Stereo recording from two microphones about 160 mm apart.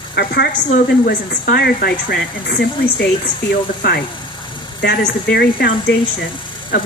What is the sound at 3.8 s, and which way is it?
Speech, 80° left.